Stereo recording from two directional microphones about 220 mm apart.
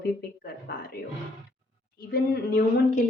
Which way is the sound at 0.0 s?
45° left (ahead or behind).